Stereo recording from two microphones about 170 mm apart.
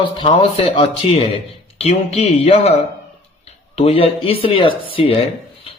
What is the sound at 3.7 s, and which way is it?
A man's voice, 35° left (ahead or behind).